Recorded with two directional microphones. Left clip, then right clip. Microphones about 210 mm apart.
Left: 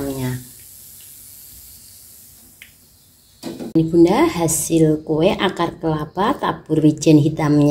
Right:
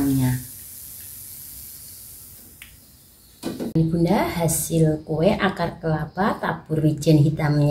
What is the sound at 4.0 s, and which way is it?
A woman's voice, 35° left (ahead or behind).